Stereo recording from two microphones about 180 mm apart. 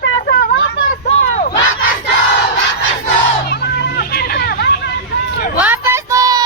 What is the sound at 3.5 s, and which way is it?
Children playing, 65° left (ahead or behind).